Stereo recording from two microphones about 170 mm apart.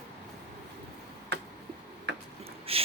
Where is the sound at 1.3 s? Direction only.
90° right.